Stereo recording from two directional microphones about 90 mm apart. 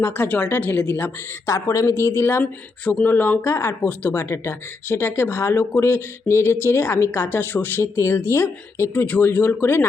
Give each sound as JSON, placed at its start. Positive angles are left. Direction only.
{"t": 0.0, "sound": "speech", "side_deg": 25}
{"t": 2.4, "sound": "speech", "side_deg": 15}
{"t": 8.9, "sound": "speech", "side_deg": 15}